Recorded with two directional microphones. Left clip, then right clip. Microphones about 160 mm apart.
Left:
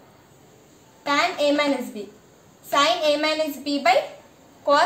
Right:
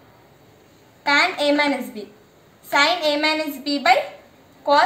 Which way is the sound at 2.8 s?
55° left (ahead or behind).